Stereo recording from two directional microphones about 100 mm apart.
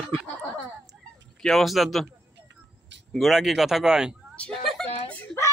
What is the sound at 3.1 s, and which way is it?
A man's voice, 5° right (ahead or behind).